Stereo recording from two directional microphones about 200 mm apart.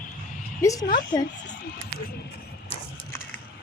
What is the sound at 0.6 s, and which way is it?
Speech, 15° left (ahead or behind).